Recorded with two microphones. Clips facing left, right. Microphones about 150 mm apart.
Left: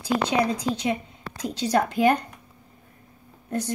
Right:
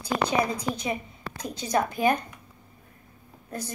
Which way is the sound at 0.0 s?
75° left (ahead or behind).